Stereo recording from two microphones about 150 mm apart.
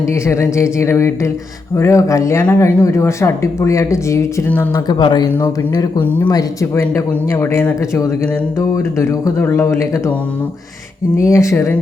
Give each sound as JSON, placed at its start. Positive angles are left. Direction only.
{"t": 0.0, "sound": "speech", "side_deg": 20}
{"t": 4.7, "sound": "speech", "side_deg": 30}
{"t": 6.1, "sound": "speech", "side_deg": 15}
{"t": 11.2, "sound": "speech", "side_deg": 20}